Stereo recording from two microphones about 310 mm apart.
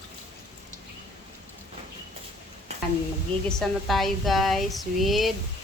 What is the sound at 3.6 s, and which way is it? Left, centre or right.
Speech, centre.